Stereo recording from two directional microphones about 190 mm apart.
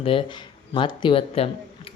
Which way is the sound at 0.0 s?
30° left (ahead or behind).